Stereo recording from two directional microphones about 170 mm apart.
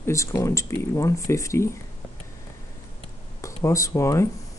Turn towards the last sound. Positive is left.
turn(degrees=15)  # may be behind; listen again after turning